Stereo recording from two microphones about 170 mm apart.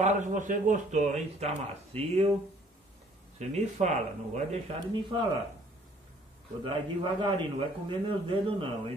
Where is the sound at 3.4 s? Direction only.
45° right (ahead or behind).